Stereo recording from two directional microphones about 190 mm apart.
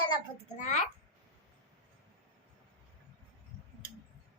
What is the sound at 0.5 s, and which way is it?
Speech, 40° left (ahead or behind).